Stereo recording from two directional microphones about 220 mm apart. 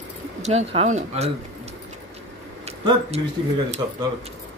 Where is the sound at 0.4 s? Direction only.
30° right (ahead or behind).